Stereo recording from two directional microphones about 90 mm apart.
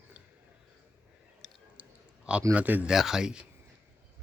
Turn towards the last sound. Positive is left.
turn(degrees=-10)  # may be behind; listen again after turning